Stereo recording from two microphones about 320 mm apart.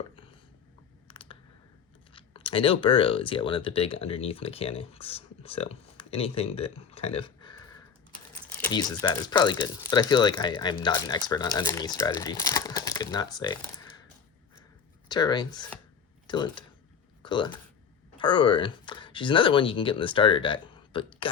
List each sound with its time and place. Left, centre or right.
1.0 s computer keyboard: centre
2.1 s speech: centre
15.1 s speech: centre